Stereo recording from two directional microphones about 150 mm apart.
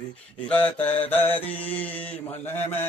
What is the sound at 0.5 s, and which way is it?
Mantra, 10° left (ahead or behind).